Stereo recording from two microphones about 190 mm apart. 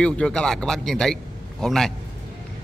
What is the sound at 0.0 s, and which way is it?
A man's voice, 5° left (ahead or behind).